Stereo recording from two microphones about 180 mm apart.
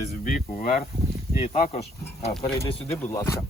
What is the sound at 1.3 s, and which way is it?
Speech, 35° left (ahead or behind).